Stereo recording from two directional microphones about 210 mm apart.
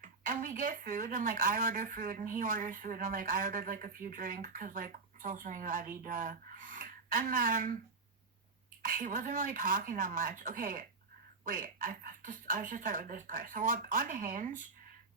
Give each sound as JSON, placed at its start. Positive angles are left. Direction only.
{"t": 0.0, "sound": "a woman's voice", "side_deg": -40}
{"t": 8.8, "sound": "a woman's voice", "side_deg": -40}